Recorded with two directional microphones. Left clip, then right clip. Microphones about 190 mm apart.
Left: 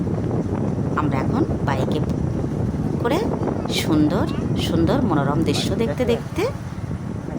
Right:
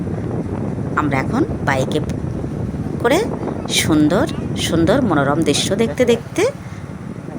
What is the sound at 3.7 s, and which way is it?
A woman's voice, 25° right (ahead or behind).